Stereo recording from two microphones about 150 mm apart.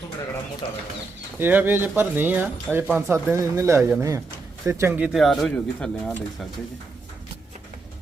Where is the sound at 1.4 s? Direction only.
15° right (ahead or behind).